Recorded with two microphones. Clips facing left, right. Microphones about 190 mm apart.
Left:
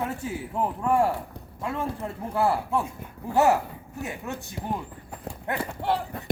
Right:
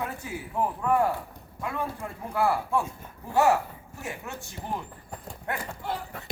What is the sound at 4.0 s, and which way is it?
Speech, 20° left (ahead or behind).